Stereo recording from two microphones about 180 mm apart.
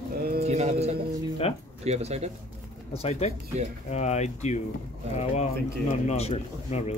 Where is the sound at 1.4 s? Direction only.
35° left (ahead or behind).